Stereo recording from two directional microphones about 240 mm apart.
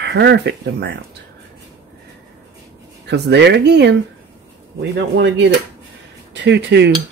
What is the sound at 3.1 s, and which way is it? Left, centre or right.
Speech, right.